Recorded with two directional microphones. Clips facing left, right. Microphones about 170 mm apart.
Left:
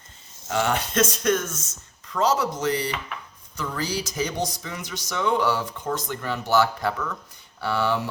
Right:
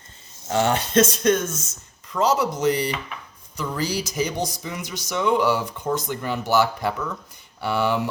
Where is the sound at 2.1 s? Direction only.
5° right (ahead or behind).